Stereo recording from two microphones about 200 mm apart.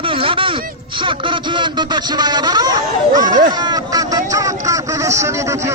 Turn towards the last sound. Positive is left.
turn(degrees=-15)  # may be behind; listen again after turning